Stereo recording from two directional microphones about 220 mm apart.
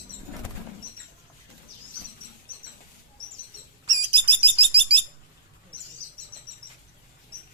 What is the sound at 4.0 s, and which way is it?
Bird, 25° right (ahead or behind).